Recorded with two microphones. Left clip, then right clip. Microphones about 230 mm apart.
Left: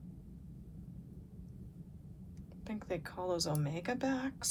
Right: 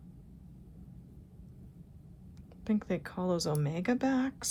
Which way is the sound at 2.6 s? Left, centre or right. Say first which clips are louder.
Right 6 dB; right.